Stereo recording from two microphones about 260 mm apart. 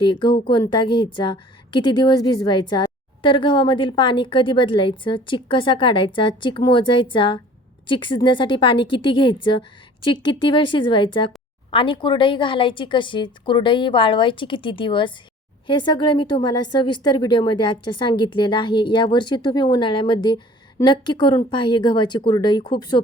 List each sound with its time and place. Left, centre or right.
0.0 s a woman's voice: centre